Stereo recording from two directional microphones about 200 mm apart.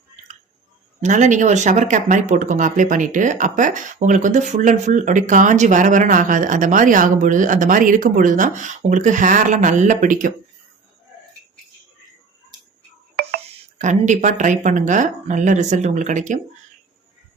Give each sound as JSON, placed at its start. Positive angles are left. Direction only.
{"t": 1.0, "sound": "speech", "side_deg": -40}
{"t": 13.7, "sound": "speech", "side_deg": -35}